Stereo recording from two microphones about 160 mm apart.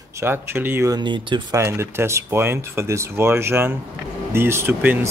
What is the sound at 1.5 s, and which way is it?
Speech, 15° right (ahead or behind).